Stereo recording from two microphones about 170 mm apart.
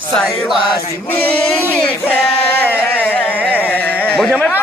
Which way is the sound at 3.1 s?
10° left (ahead or behind).